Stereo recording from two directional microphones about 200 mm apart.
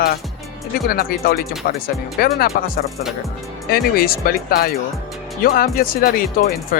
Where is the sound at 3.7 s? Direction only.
50° left (ahead or behind).